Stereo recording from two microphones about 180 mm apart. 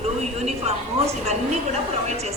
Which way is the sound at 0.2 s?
40° right (ahead or behind).